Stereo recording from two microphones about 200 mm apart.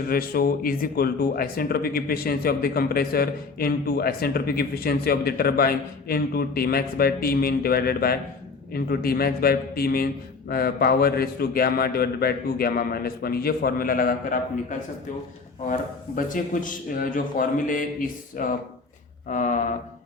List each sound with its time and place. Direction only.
0.1 s speech: 45° left (ahead or behind)